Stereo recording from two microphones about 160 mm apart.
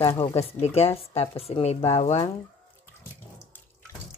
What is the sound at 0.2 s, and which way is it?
Speech, 40° left (ahead or behind).